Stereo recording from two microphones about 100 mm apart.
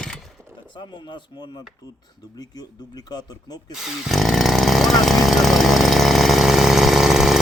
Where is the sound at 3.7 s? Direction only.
5° right (ahead or behind).